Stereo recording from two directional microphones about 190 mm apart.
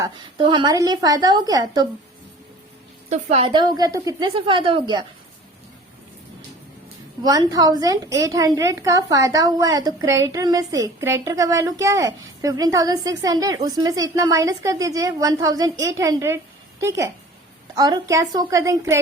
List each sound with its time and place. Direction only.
0.0 s a woman's voice: 25° right (ahead or behind)
3.1 s a woman's voice: 35° right (ahead or behind)
7.2 s a woman's voice: 20° right (ahead or behind)